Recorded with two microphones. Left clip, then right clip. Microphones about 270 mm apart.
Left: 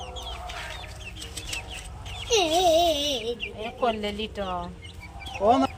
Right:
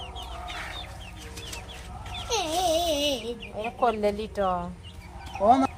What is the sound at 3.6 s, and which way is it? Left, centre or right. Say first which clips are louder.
Speech: right 3 dB; centre.